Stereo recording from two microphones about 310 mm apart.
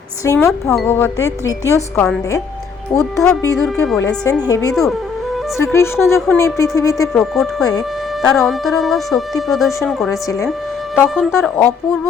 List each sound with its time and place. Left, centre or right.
0.3 s a woman's voice: centre
8.3 s a woman's voice: centre